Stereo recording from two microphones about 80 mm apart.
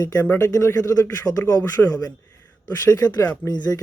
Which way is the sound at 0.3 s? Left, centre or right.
Left.